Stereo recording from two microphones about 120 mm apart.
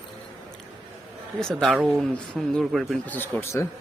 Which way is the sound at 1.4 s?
5° left (ahead or behind).